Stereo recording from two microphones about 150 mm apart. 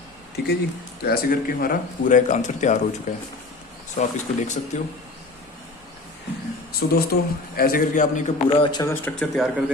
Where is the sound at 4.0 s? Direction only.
50° left (ahead or behind).